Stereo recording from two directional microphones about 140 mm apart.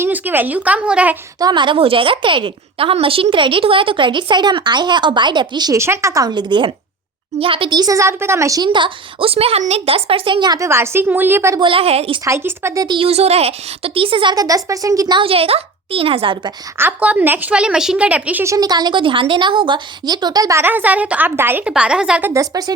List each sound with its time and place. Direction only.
0.0 s a woman's voice: 15° right (ahead or behind)
1.4 s a woman's voice: 30° right (ahead or behind)
10.7 s a woman's voice: 20° right (ahead or behind)
11.6 s a woman's voice: 40° right (ahead or behind)
12.2 s a woman's voice: 20° right (ahead or behind)
13.0 s a woman's voice: 45° right (ahead or behind)
16.7 s a woman's voice: 15° right (ahead or behind)
18.5 s a woman's voice: 30° right (ahead or behind); by 22.3 s 5° right (ahead or behind)
22.3 s a woman's voice: 25° right (ahead or behind)